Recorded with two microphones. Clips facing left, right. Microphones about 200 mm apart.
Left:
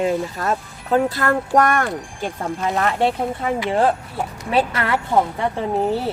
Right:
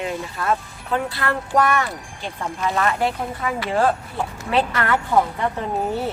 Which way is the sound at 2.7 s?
30° left (ahead or behind).